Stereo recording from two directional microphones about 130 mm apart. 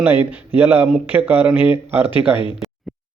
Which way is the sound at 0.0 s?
15° right (ahead or behind).